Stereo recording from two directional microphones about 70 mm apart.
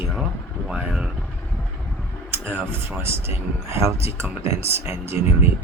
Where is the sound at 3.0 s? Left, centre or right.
Right.